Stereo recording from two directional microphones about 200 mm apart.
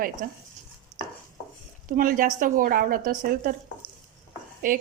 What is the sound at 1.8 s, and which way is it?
A woman's voice, 40° right (ahead or behind).